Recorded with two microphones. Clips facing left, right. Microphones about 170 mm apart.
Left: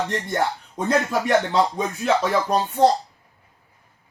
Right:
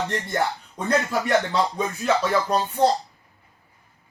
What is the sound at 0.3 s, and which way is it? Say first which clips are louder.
Music: left 1 dB; 20° left (ahead or behind).